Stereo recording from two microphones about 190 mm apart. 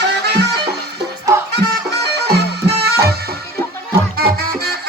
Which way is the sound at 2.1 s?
60° right (ahead or behind).